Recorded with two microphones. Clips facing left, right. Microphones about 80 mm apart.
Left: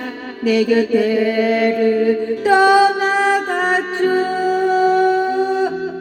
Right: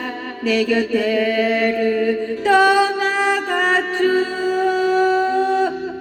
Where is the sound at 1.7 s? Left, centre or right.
Centre.